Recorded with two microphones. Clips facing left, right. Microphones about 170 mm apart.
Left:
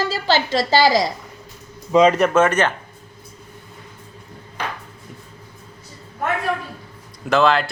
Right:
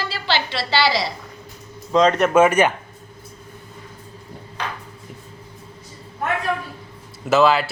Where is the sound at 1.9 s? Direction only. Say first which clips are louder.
Left 2 dB; 10° left (ahead or behind).